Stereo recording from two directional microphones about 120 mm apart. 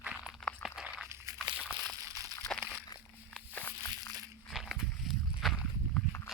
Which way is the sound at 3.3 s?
10° left (ahead or behind).